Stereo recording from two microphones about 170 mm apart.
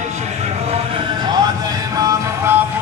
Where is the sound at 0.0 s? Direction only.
40° right (ahead or behind); by 2.5 s 20° right (ahead or behind).